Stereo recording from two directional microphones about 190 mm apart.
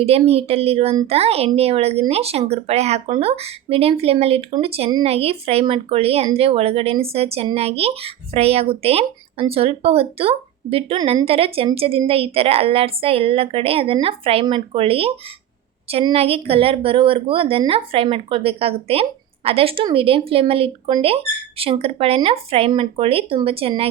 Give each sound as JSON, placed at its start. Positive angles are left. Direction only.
{"t": 0.0, "sound": "a woman's voice", "side_deg": -30}